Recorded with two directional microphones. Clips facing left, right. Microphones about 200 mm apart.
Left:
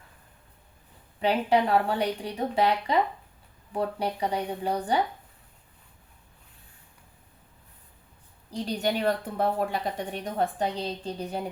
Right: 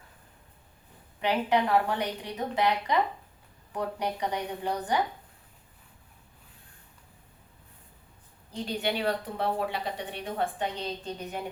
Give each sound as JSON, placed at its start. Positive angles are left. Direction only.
{"t": 1.2, "sound": "a woman's voice", "side_deg": 30}
{"t": 8.5, "sound": "a woman's voice", "side_deg": 40}